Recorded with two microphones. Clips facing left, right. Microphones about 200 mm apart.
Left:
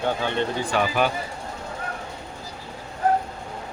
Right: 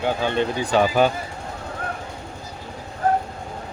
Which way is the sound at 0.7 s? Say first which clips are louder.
Right 5 dB; 25° right (ahead or behind).